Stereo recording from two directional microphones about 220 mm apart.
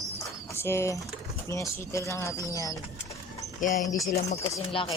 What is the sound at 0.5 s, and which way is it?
Speech, 10° left (ahead or behind).